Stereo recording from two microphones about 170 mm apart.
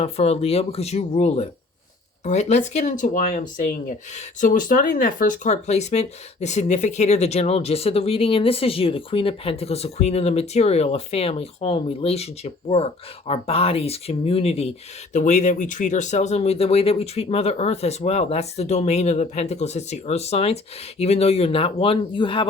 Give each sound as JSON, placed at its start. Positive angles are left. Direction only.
{"t": 0.0, "sound": "speech", "side_deg": 40}